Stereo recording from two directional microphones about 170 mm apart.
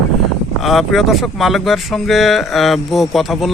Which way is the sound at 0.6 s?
Centre (ahead or behind).